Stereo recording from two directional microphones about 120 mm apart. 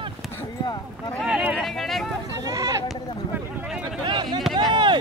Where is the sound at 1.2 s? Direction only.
10° right (ahead or behind).